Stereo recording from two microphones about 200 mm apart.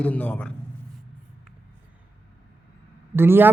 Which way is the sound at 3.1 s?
10° right (ahead or behind).